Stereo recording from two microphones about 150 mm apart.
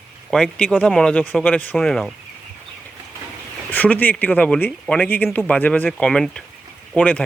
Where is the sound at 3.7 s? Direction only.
10° left (ahead or behind).